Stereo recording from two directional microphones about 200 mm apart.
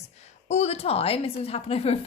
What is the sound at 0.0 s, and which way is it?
A woman's voice, 35° left (ahead or behind).